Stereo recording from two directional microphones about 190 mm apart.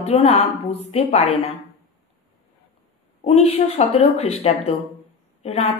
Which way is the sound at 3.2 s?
30° left (ahead or behind).